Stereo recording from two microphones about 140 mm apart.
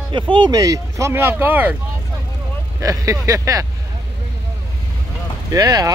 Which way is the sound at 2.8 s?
25° right (ahead or behind).